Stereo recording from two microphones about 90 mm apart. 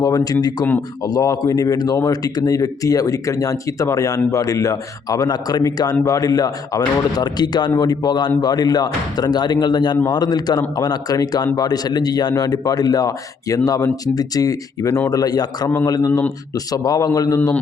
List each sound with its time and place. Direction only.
0.0 s a man's voice: 45° left (ahead or behind)